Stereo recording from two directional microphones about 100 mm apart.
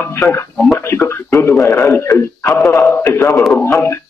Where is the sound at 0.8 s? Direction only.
25° left (ahead or behind).